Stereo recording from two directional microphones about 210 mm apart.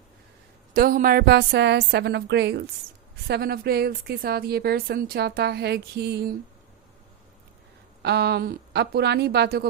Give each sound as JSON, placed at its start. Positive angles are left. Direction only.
{"t": 0.7, "sound": "speech", "side_deg": -40}
{"t": 8.0, "sound": "speech", "side_deg": -50}